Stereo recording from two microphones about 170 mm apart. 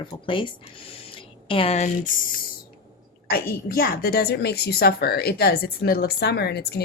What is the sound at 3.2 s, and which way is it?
A woman's voice, 60° left (ahead or behind).